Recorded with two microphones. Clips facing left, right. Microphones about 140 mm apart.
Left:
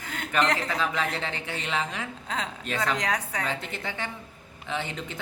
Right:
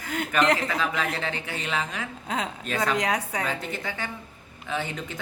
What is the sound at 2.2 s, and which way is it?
A woman's voice, 10° right (ahead or behind).